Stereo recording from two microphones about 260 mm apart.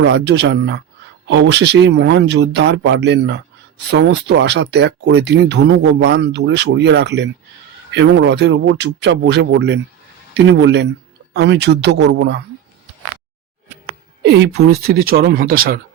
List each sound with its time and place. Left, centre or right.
0.0 s speech: right
14.2 s speech: right